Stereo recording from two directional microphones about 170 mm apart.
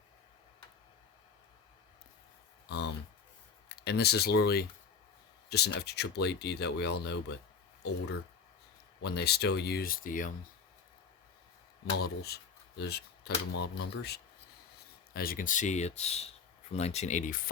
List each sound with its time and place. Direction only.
2.6 s a sound: 90° left
3.8 s speech: 70° left (ahead or behind)
9.0 s speech: 70° left (ahead or behind); by 10.3 s 55° left (ahead or behind)
11.9 s speech: 70° left (ahead or behind)
15.1 s speech: 60° left (ahead or behind)